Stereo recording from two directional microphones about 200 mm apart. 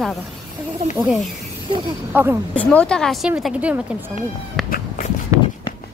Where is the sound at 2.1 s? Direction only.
10° right (ahead or behind).